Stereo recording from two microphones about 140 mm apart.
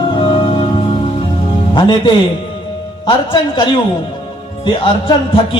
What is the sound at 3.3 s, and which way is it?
A man's voice, 35° left (ahead or behind).